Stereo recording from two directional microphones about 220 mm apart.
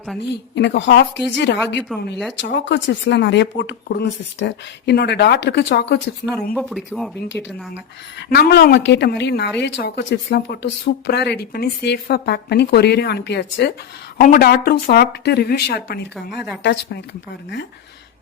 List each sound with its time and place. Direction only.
0.5 s speech: 50° left (ahead or behind)
1.9 s speech: centre (ahead or behind)
2.3 s speech: 55° left (ahead or behind)
6.5 s speech: centre (ahead or behind)
7.3 s speech: 55° left (ahead or behind)